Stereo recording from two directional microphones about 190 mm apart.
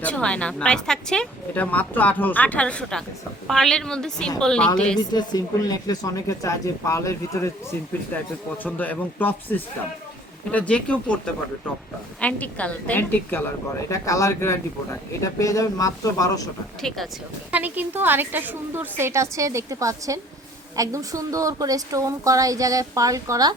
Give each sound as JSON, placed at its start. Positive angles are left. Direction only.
{"t": 0.0, "sound": "a woman's voice", "side_deg": 5}
{"t": 4.9, "sound": "a woman's voice", "side_deg": 20}
{"t": 12.2, "sound": "a woman's voice", "side_deg": 5}
{"t": 17.5, "sound": "a woman's voice", "side_deg": -10}